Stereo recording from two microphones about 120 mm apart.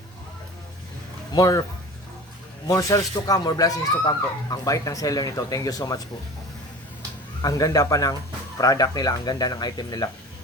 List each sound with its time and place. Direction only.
1.4 s speech: 30° left (ahead or behind)
2.6 s speech: 30° left (ahead or behind)
7.4 s speech: 30° left (ahead or behind)